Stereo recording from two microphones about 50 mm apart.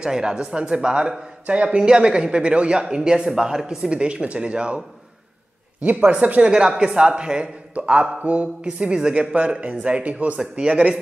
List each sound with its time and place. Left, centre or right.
0.0 s a man's voice: centre
6.4 s a man's voice: centre